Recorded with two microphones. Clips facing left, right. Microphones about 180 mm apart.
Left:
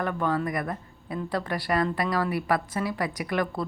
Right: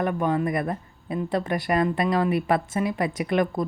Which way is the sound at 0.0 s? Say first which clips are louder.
Right 3 dB; 20° right (ahead or behind).